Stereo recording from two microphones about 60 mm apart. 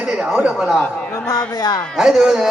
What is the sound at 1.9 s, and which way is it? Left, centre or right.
Speech, centre.